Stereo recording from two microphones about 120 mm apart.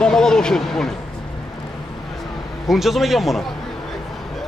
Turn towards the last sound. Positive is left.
turn(degrees=0)  # may be behind; listen again after turning